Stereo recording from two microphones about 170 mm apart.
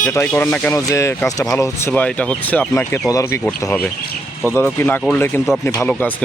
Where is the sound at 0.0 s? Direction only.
15° left (ahead or behind).